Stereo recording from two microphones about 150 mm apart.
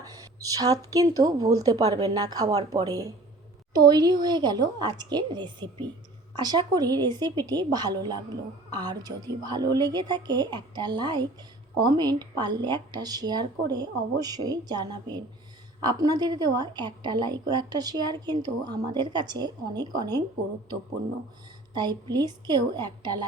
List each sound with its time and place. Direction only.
0.0 s a woman's voice: 25° right (ahead or behind)
21.8 s a woman's voice: 30° right (ahead or behind)